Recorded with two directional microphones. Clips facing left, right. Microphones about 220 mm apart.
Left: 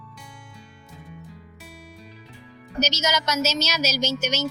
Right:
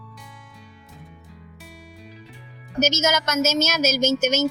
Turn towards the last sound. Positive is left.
turn(degrees=-50)  # may be behind; listen again after turning